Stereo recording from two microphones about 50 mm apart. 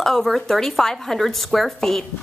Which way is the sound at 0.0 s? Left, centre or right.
Centre.